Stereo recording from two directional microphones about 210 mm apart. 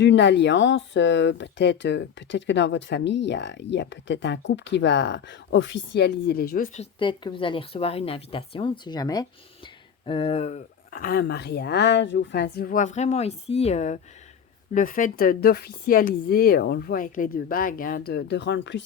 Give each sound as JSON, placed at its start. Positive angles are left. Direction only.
{"t": 0.0, "sound": "speech", "side_deg": 55}
{"t": 6.7, "sound": "speech", "side_deg": 25}